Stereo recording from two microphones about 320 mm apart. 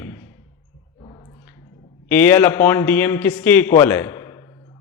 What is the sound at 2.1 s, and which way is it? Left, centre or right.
A man's voice, centre.